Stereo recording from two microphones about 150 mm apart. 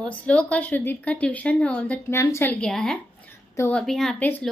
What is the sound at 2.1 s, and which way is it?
A woman's voice, 20° left (ahead or behind).